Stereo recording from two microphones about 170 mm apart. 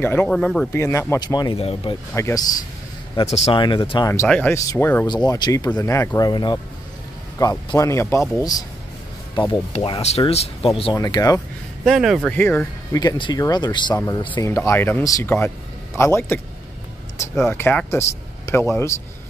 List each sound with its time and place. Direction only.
0.0 s speech: 10° left (ahead or behind)
0.7 s speech: 15° left (ahead or behind)
1.6 s speech: 35° left (ahead or behind)
2.1 s speech: 15° left (ahead or behind)
3.4 s speech: 30° left (ahead or behind)
4.1 s speech: 10° left (ahead or behind)
5.0 s speech: 25° left (ahead or behind)
11.0 s speech: 20° left (ahead or behind)
11.8 s speech: centre (ahead or behind)
12.4 s speech: 10° left (ahead or behind)
13.0 s speech: 25° left (ahead or behind)
17.4 s speech: 10° left (ahead or behind)